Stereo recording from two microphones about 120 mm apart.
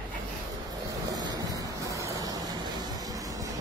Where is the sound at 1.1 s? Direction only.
35° right (ahead or behind).